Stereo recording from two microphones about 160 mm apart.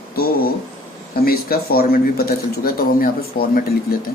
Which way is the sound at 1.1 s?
70° left (ahead or behind).